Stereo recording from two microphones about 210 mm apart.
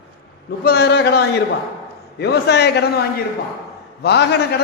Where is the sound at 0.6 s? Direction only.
50° left (ahead or behind).